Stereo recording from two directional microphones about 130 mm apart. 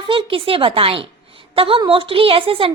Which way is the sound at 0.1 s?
45° right (ahead or behind).